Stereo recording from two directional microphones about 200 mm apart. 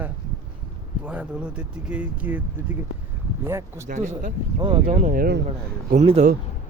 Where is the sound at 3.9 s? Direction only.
40° right (ahead or behind).